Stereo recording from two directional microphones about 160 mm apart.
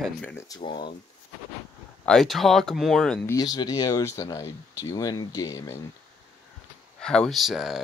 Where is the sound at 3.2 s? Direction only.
20° left (ahead or behind).